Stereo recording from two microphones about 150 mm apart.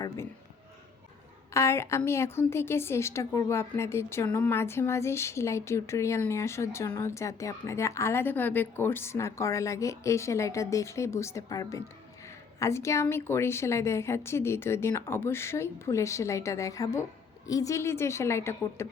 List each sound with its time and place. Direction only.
1.5 s a woman's voice: 20° left (ahead or behind)